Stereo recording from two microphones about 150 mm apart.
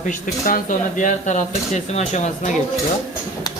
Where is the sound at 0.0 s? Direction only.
65° left (ahead or behind).